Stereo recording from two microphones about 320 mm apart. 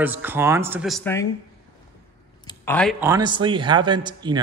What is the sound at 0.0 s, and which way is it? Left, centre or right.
A man's voice, centre.